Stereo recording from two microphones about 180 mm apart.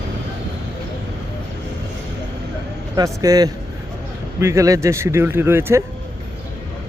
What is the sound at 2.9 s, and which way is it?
A man's voice, 20° right (ahead or behind).